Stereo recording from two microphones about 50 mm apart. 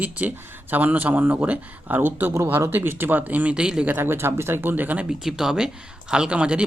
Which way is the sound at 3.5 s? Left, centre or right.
Centre.